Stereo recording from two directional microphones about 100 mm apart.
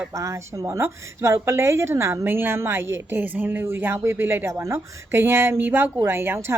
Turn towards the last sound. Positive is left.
turn(degrees=-25)  # may be behind; listen again after turning